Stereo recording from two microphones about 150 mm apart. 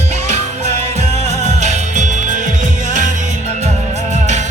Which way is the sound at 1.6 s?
55° right (ahead or behind).